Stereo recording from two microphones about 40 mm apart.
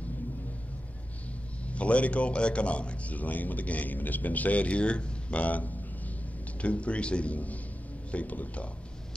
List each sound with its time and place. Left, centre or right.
1.7 s a man's voice: left